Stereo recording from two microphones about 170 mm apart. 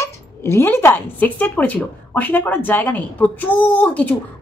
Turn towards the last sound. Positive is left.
turn(degrees=10)  # may be behind; listen again after turning